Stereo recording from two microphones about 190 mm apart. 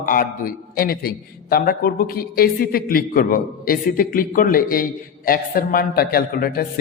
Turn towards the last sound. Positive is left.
turn(degrees=50)  # may be behind; listen again after turning